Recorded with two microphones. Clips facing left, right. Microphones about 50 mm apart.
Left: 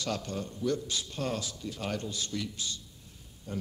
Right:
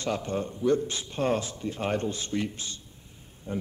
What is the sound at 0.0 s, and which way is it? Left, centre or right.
A man's voice, right.